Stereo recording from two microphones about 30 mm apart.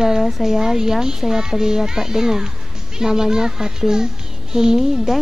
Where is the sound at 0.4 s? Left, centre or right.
Centre.